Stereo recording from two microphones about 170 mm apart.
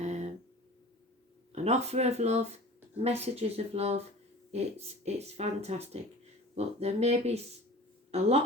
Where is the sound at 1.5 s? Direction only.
40° right (ahead or behind).